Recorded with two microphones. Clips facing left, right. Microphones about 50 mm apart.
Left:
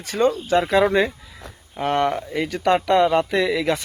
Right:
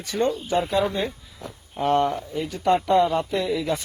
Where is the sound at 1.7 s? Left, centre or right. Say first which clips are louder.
Left 1 dB; left.